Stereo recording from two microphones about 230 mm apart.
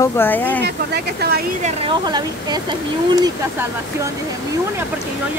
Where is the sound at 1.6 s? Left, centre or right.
Centre.